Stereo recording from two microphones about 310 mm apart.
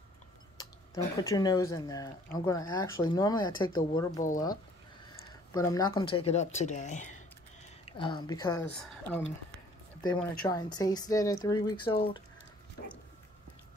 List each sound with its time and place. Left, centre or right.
1.2 s speech: centre
5.5 s speech: centre